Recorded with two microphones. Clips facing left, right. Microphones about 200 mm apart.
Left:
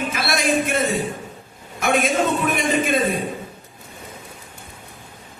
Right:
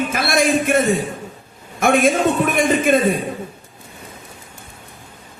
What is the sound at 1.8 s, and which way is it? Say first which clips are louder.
A man's voice: right 4 dB; 50° right (ahead or behind).